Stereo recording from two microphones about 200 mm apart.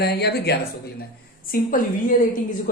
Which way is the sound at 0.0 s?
55° left (ahead or behind).